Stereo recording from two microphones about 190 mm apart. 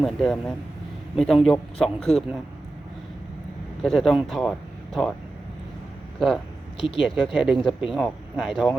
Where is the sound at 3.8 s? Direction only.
Centre (ahead or behind).